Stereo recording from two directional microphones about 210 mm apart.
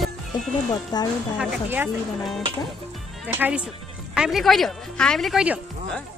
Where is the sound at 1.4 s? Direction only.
5° right (ahead or behind).